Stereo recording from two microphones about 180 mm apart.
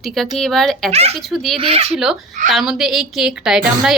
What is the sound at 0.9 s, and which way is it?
Speech, 35° right (ahead or behind).